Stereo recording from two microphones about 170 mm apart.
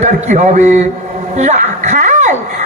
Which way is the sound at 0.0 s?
45° right (ahead or behind).